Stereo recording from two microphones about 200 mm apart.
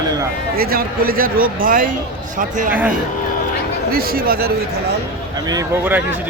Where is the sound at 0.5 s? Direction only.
50° right (ahead or behind).